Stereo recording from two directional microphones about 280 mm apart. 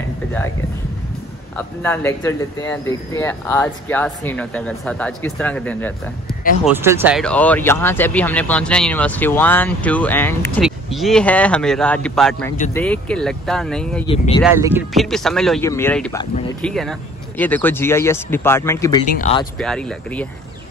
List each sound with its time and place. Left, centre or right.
1.8 s speech: centre
6.6 s speech: centre
14.0 s speech: centre
14.4 s speech: centre
19.0 s speech: left
19.6 s speech: centre